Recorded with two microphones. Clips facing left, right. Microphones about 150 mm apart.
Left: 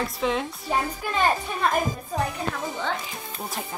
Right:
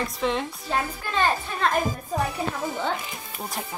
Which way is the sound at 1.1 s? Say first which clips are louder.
Even; 10° left (ahead or behind).